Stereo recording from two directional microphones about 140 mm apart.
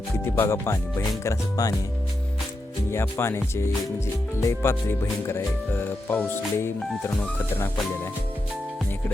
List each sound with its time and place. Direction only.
0.3 s speech: 20° left (ahead or behind)
2.9 s speech: 15° left (ahead or behind)